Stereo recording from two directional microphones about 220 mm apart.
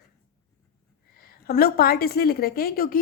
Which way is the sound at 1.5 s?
45° left (ahead or behind).